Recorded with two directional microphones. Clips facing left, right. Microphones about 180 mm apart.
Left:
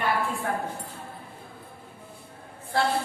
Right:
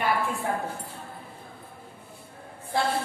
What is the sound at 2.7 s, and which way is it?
Speech, 15° right (ahead or behind).